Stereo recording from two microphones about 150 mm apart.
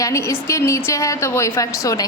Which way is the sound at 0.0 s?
20° left (ahead or behind).